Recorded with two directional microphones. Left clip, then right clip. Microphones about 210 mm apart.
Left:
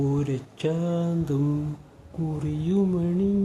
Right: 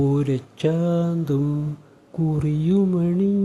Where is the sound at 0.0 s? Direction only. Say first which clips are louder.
Right 5 dB; 15° right (ahead or behind).